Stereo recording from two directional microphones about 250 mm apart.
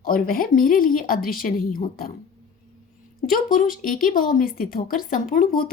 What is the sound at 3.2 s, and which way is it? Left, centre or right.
A woman's voice, left.